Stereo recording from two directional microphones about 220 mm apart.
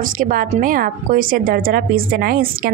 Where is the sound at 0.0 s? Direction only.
40° right (ahead or behind).